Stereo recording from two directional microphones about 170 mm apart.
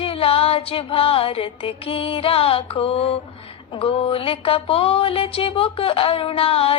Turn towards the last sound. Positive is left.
turn(degrees=35)  # may be behind; listen again after turning